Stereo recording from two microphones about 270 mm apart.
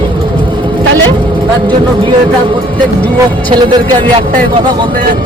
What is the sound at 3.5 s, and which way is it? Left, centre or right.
Speech, centre.